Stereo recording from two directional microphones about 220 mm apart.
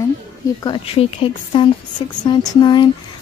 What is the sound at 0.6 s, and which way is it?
Speech, 25° left (ahead or behind).